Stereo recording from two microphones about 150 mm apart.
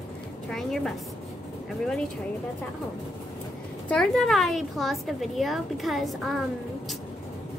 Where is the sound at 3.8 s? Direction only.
5° left (ahead or behind).